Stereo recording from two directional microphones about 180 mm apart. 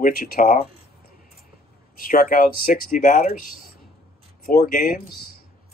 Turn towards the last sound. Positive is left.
turn(degrees=55)  # may be behind; listen again after turning